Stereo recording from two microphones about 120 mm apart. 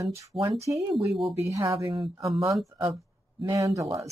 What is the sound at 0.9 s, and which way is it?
Speech, 50° right (ahead or behind).